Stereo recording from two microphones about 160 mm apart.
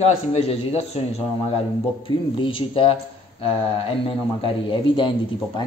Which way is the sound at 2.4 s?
35° left (ahead or behind).